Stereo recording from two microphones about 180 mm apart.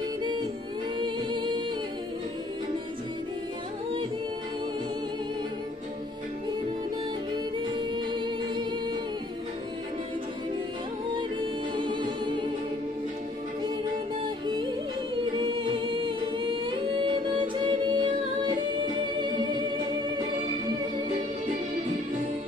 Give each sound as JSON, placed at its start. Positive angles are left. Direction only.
{"t": 0.9, "sound": "music", "side_deg": -25}
{"t": 7.5, "sound": "music", "side_deg": -25}
{"t": 11.1, "sound": "music", "side_deg": -25}
{"t": 14.4, "sound": "music", "side_deg": -25}
{"t": 15.3, "sound": "a capella", "side_deg": -30}